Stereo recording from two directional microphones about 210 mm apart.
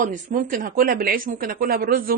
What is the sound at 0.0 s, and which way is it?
A woman's voice, 40° right (ahead or behind).